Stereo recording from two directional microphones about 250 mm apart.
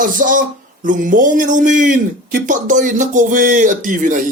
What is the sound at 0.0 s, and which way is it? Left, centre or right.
Speech, right.